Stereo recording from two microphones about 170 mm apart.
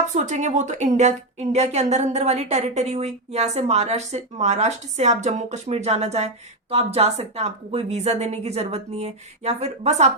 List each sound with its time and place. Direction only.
0.1 s a woman's voice: 45° right (ahead or behind)